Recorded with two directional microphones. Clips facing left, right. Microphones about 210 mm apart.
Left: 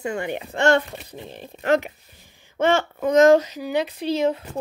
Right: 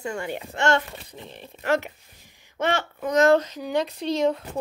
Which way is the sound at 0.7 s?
35° left (ahead or behind).